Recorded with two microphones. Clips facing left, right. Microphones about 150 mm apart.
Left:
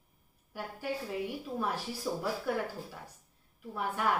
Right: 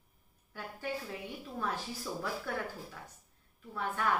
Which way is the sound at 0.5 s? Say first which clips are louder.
Left 2 dB; 10° left (ahead or behind).